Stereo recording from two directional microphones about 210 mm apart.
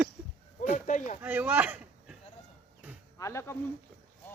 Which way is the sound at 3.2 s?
15° left (ahead or behind).